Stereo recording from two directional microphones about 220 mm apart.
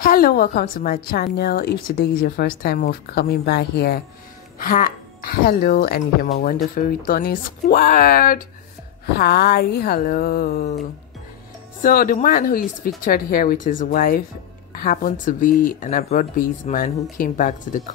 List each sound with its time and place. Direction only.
0.0 s a woman's voice: 40° left (ahead or behind)
11.8 s speech: 40° left (ahead or behind)